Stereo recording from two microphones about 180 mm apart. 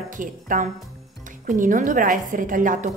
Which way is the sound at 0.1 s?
45° right (ahead or behind).